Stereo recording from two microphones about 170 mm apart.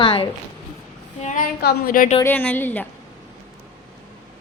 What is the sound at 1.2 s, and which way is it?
Speech, 45° left (ahead or behind).